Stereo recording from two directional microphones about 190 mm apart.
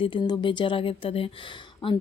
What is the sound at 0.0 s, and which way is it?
Speech, 25° left (ahead or behind).